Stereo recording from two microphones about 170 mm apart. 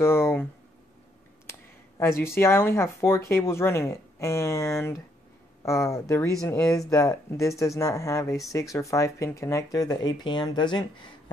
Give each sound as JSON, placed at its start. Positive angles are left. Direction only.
{"t": 0.0, "sound": "speech", "side_deg": 15}
{"t": 1.5, "sound": "speech", "side_deg": 15}
{"t": 6.9, "sound": "speech", "side_deg": 20}